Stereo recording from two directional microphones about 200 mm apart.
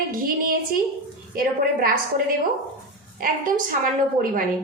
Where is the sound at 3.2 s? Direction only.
40° right (ahead or behind).